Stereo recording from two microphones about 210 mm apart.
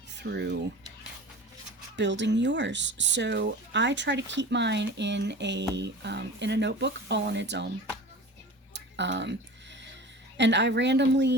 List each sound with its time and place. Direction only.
0.2 s speech: 55° right (ahead or behind)
2.0 s speech: 60° right (ahead or behind)
8.7 s tick-tock: 55° right (ahead or behind)
10.3 s speech: 55° right (ahead or behind)